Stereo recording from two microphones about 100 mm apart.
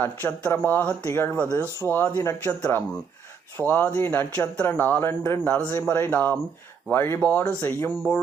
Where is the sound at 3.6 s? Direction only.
20° left (ahead or behind).